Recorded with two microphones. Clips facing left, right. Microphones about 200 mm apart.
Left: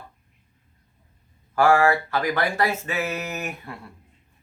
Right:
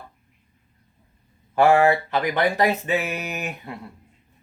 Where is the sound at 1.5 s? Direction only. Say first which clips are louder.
Right 2 dB; 20° right (ahead or behind).